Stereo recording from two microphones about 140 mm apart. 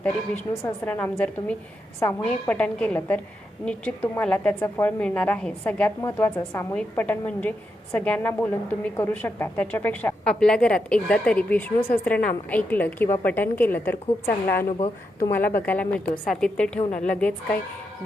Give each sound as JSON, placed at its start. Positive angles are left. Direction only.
{"t": 0.0, "sound": "a woman's voice", "side_deg": 10}